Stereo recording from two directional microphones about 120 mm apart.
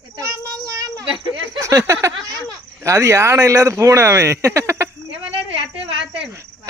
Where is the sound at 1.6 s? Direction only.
25° right (ahead or behind).